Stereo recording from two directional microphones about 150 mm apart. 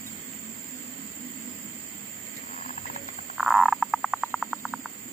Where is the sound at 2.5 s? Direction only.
50° left (ahead or behind).